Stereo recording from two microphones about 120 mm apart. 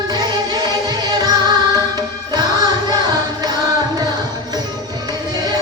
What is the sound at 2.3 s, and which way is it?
Music, 35° right (ahead or behind).